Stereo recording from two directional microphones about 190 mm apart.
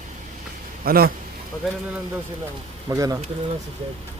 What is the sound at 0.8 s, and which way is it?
Speech, 50° right (ahead or behind).